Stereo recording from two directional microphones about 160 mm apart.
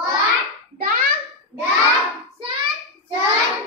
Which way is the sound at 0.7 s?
70° right (ahead or behind).